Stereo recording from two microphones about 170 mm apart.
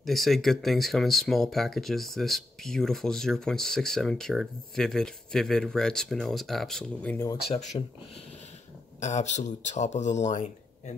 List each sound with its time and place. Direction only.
0.0 s speech: centre (ahead or behind)
7.5 s speech: 40° left (ahead or behind)
9.0 s speech: 40° left (ahead or behind)